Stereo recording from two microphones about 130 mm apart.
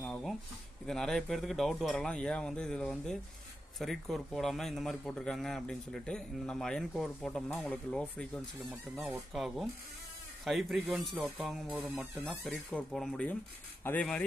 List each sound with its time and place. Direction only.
0.0 s a sound: centre (ahead or behind)
0.8 s a man's voice: 5° left (ahead or behind)
9.3 s a man's voice: centre (ahead or behind); by 14.0 s 15° left (ahead or behind)